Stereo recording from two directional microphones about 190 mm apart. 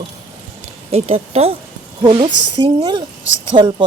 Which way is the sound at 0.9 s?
35° right (ahead or behind).